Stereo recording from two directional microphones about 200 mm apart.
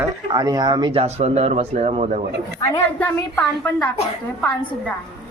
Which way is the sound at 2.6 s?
15° left (ahead or behind).